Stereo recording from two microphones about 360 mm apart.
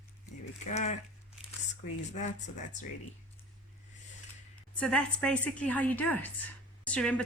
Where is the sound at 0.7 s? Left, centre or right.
Centre.